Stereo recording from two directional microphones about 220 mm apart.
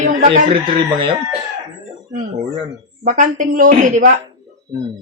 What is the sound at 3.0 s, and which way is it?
A man's voice, 35° right (ahead or behind).